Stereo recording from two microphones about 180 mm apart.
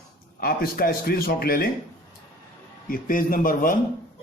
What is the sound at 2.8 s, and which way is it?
Speech, 50° left (ahead or behind).